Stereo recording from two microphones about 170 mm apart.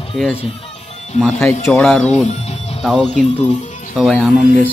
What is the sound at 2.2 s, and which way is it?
Music, 40° left (ahead or behind).